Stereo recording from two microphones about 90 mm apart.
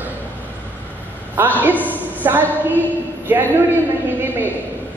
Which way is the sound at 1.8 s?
20° right (ahead or behind).